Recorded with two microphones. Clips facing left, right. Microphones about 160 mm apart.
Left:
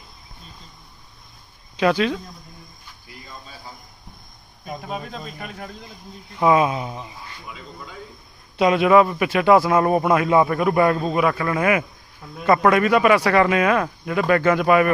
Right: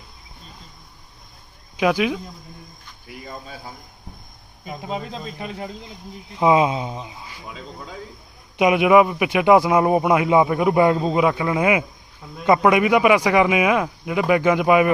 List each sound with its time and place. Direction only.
1.7 s a man's voice: 10° right (ahead or behind)
3.1 s cricket: 55° right (ahead or behind)
4.8 s speech: 20° right (ahead or behind)
8.5 s a man's voice: 15° right (ahead or behind)